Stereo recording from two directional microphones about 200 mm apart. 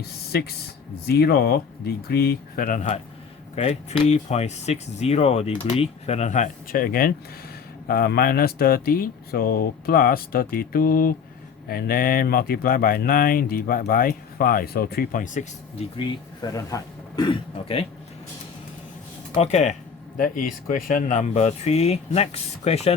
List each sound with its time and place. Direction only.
0.0 s a sound: 50° left (ahead or behind)
1.0 s speech: 50° left (ahead or behind)
3.5 s speech: 30° left (ahead or behind)
16.0 s speech: 20° left (ahead or behind)
19.4 s speech: 35° left (ahead or behind)